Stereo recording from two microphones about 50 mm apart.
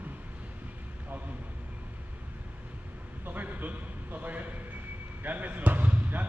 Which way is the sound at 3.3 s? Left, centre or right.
Right.